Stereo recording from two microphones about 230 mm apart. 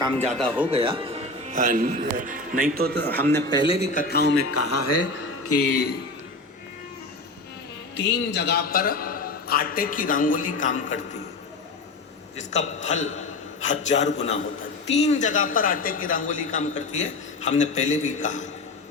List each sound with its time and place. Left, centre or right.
0.0 s a man's voice: right
3.0 s a man's voice: centre
3.5 s a man's voice: left
4.0 s a man's voice: left
4.4 s a man's voice: left
5.1 s a sound: left
7.9 s a man's voice: left
12.4 s a man's voice: left